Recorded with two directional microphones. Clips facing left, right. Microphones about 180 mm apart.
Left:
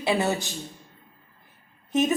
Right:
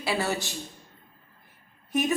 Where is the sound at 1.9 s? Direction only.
20° left (ahead or behind).